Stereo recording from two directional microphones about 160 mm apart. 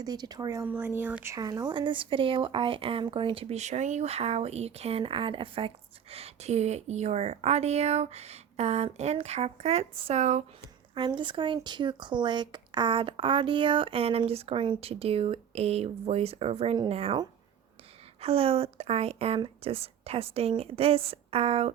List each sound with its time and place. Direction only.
0.0 s speech: 25° right (ahead or behind)
0.7 s speech: 10° right (ahead or behind); by 10.4 s 50° right (ahead or behind)
10.9 s speech: 30° right (ahead or behind)
18.2 s speech: 40° right (ahead or behind)